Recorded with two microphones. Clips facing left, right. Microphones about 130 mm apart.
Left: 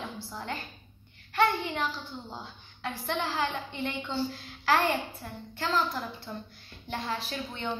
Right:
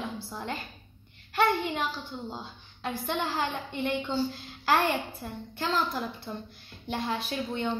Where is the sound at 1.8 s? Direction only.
10° right (ahead or behind).